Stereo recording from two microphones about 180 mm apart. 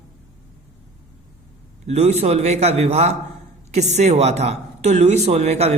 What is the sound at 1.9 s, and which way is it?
Speech, 40° right (ahead or behind).